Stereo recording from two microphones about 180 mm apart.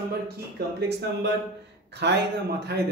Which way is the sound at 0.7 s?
65° right (ahead or behind).